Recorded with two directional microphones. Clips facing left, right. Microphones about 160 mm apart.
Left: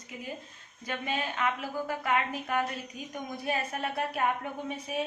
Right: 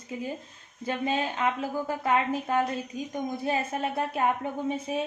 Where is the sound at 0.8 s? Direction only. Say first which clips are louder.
Right 5 dB; 30° right (ahead or behind).